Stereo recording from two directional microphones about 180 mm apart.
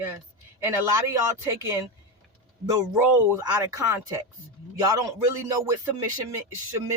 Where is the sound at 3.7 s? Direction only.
15° right (ahead or behind).